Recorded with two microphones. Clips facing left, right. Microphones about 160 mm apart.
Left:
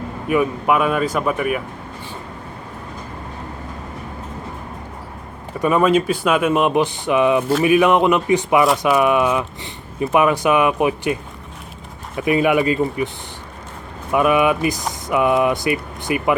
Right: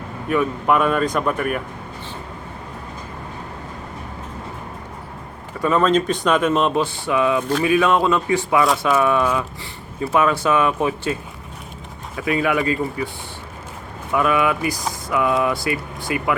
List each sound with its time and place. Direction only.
0.3 s speech: 10° left (ahead or behind)
5.5 s speech: 15° left (ahead or behind)
14.1 s speech: 20° left (ahead or behind)